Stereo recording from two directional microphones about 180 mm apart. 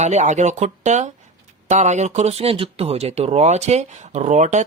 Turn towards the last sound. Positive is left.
turn(degrees=-40)  # may be behind; listen again after turning